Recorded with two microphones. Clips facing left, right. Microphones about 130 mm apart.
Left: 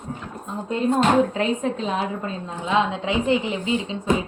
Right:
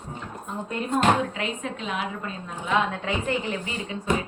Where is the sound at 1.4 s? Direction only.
35° left (ahead or behind).